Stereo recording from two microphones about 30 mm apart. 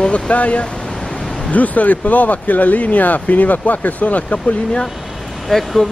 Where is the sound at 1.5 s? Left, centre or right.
Left.